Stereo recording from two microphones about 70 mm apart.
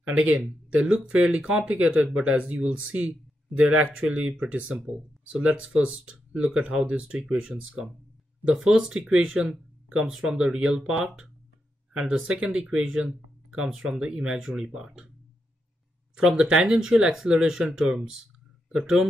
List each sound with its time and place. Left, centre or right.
0.0 s speech: centre
16.2 s speech: centre